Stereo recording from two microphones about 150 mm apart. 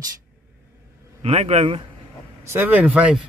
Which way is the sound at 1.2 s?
45° right (ahead or behind).